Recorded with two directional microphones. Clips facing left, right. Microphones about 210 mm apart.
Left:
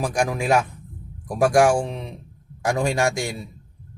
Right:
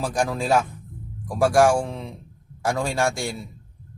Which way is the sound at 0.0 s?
15° left (ahead or behind).